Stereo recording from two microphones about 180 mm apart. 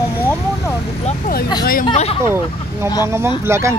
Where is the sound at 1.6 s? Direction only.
55° left (ahead or behind).